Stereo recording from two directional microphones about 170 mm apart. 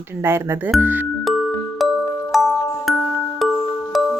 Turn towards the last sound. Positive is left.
turn(degrees=0)  # may be behind; listen again after turning